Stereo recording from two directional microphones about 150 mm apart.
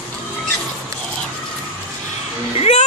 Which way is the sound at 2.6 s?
45° left (ahead or behind).